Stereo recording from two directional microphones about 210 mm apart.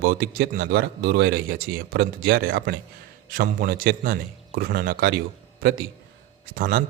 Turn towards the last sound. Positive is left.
turn(degrees=-45)  # may be behind; listen again after turning